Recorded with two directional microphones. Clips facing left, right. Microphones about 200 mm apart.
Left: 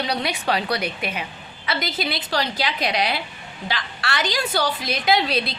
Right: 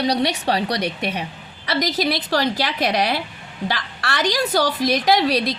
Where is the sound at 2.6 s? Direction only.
45° right (ahead or behind).